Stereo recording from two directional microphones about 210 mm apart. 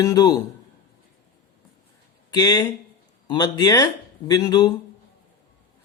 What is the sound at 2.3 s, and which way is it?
Speech, 20° left (ahead or behind).